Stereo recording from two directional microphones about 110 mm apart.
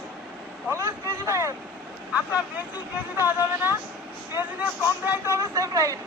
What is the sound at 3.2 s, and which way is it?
Speech, 20° right (ahead or behind).